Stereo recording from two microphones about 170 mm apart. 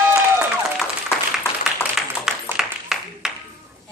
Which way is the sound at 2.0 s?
Centre (ahead or behind).